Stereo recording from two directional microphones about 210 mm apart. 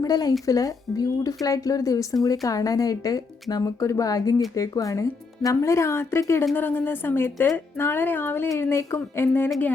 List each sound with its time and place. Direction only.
0.0 s a woman's voice: 15° left (ahead or behind)